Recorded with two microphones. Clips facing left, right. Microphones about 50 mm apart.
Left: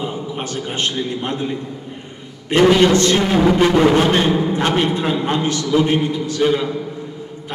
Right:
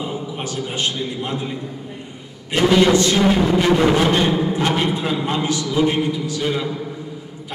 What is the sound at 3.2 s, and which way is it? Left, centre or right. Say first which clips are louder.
Music: left 2 dB; left.